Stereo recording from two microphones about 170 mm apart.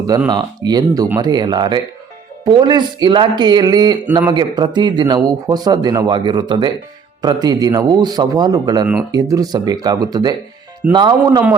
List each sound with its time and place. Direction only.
0.3 s speech: 25° right (ahead or behind)